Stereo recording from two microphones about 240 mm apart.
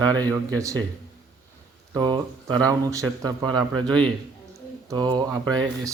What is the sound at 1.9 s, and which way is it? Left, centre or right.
Speech, centre.